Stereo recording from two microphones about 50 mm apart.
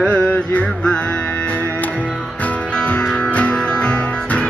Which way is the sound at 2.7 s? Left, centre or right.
Left.